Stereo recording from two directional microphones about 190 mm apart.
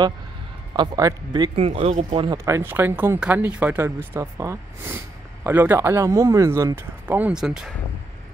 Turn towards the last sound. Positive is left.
turn(degrees=-5)  # may be behind; listen again after turning